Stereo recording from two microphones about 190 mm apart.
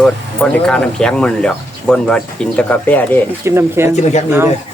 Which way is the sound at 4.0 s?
35° left (ahead or behind).